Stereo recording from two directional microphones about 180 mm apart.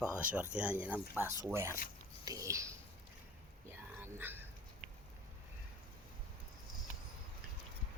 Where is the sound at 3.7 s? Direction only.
10° right (ahead or behind).